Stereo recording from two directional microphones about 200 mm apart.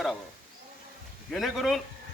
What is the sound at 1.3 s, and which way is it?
Speech, centre (ahead or behind).